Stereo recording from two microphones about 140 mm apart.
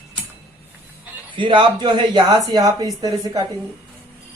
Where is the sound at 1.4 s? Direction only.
35° right (ahead or behind).